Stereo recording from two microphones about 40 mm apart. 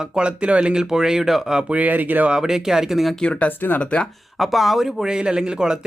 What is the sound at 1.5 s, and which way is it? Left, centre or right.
Speech, right.